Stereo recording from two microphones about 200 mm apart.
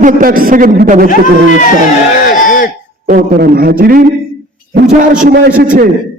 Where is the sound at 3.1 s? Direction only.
45° right (ahead or behind).